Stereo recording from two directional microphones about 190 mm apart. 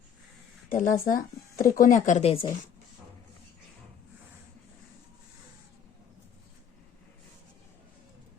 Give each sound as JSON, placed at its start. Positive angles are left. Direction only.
{"t": 0.7, "sound": "speech", "side_deg": 45}